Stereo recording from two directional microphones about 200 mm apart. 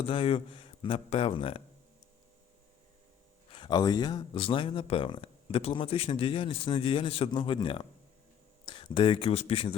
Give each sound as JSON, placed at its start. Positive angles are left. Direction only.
{"t": 0.0, "sound": "speech", "side_deg": 25}
{"t": 3.5, "sound": "speech", "side_deg": 25}